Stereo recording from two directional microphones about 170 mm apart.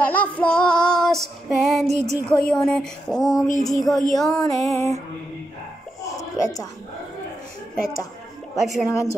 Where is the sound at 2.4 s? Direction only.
5° left (ahead or behind).